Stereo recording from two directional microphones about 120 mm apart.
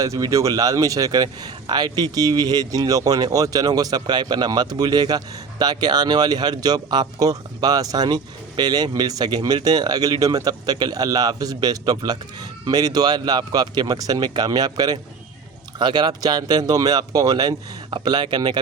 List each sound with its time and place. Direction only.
0.0 s speech: 30° right (ahead or behind)